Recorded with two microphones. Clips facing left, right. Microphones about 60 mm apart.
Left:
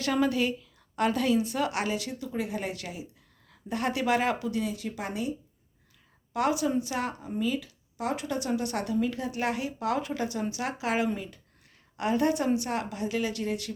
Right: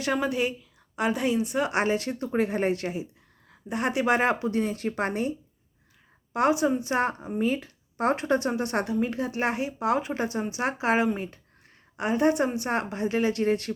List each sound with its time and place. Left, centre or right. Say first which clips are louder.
0.0 s speech: even; right
4.6 s speech: right 5 dB; right
6.3 s speech: right 3 dB; right